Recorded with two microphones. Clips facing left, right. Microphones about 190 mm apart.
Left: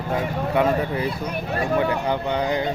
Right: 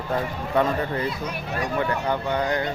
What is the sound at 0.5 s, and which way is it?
Speech, 10° left (ahead or behind).